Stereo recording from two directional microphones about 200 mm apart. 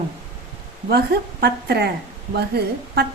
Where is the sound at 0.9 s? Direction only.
55° right (ahead or behind).